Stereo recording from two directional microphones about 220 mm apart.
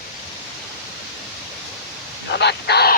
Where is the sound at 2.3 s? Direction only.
50° left (ahead or behind).